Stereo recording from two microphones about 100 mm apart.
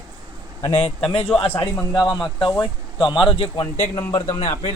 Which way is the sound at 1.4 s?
75° left (ahead or behind).